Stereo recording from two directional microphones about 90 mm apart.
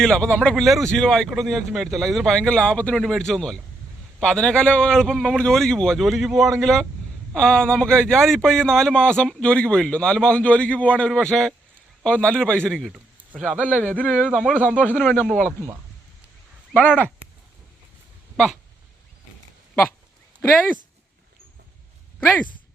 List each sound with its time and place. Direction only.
0.0 s a man's voice: 10° left (ahead or behind)
12.9 s speech: 15° right (ahead or behind)
13.8 s speech: 20° left (ahead or behind)
14.1 s speech: 15° right (ahead or behind)
14.8 s speech: 20° left (ahead or behind)
15.4 s speech: 30° right (ahead or behind)
16.7 s speech: 20° left (ahead or behind)